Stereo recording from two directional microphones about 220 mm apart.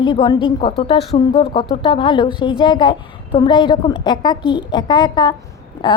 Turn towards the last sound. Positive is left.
turn(degrees=20)  # may be behind; listen again after turning